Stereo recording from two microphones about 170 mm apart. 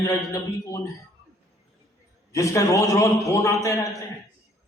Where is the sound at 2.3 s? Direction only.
20° left (ahead or behind).